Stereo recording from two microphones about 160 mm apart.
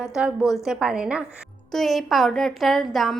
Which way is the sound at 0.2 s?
Centre (ahead or behind).